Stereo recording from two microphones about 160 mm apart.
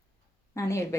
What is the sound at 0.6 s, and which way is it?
Speech, 20° left (ahead or behind).